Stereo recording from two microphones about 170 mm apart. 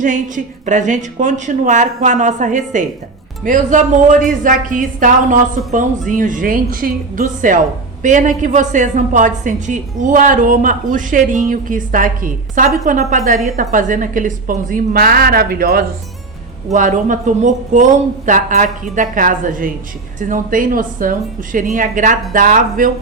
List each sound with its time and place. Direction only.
0.0 s a woman's voice: 50° right (ahead or behind)
16.7 s a woman's voice: 50° right (ahead or behind)